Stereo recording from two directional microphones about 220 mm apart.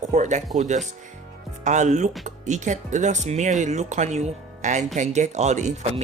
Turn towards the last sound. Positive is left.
turn(degrees=-30)  # may be behind; listen again after turning